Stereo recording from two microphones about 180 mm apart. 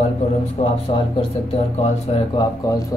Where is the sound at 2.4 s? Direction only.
20° left (ahead or behind).